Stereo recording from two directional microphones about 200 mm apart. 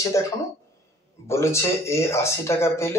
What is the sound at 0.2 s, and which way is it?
Speech, 15° left (ahead or behind).